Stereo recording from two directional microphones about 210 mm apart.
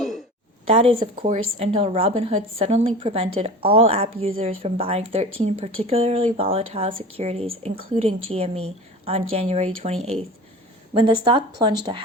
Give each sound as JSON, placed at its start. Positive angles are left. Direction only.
{"t": 0.7, "sound": "a woman's voice", "side_deg": -25}